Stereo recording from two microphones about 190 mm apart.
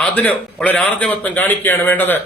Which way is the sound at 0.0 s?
10° left (ahead or behind).